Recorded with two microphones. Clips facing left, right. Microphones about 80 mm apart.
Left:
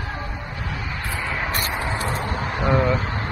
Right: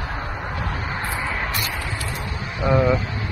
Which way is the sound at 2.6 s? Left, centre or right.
Left.